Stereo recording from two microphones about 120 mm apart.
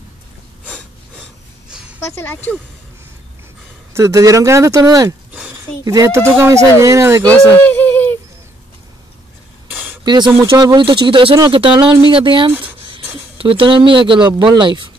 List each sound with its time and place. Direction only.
0.7 s breathing: 10° left (ahead or behind)
2.0 s speech: 20° left (ahead or behind)
3.9 s speech: 25° right (ahead or behind)
7.2 s a sound: 15° left (ahead or behind)
10.0 s speech: 40° right (ahead or behind)